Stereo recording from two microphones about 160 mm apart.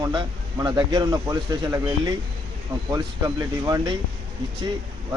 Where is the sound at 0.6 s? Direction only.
25° right (ahead or behind).